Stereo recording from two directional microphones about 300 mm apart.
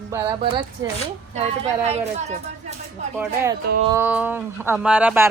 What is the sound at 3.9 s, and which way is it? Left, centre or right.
Speech, centre.